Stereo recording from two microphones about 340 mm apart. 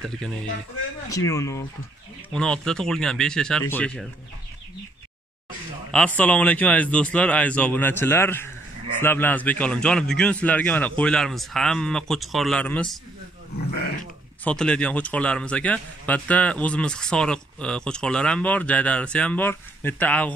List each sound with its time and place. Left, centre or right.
1.0 s speech: centre
5.9 s speech: centre
14.4 s speech: centre